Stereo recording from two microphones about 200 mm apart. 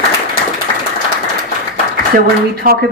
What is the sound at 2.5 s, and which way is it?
Speech, 50° right (ahead or behind).